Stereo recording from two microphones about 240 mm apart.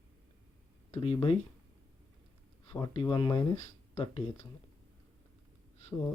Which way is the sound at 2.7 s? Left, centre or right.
Centre.